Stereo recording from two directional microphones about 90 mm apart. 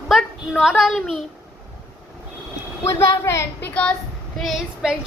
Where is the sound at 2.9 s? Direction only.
30° left (ahead or behind).